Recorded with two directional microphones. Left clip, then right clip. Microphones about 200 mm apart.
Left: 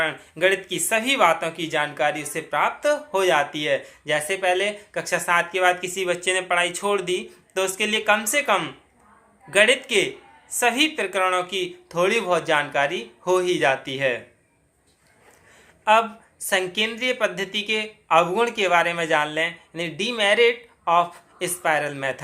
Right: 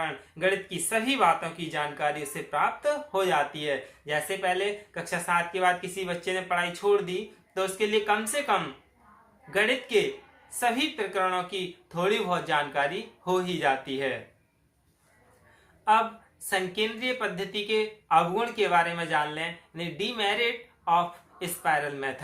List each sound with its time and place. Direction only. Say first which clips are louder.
0.0 s speech: left 7 dB; 45° left (ahead or behind)
16.5 s speech: left 6 dB; 45° left (ahead or behind)